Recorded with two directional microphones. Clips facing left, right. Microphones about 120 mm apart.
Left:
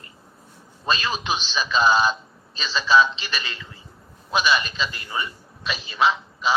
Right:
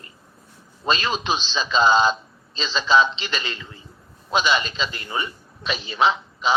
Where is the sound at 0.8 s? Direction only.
25° right (ahead or behind).